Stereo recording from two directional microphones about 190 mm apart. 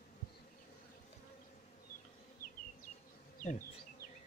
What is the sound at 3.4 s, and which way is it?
Bee, 45° left (ahead or behind).